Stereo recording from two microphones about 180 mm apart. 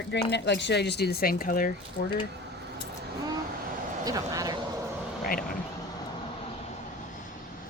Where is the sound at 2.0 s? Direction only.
90° left.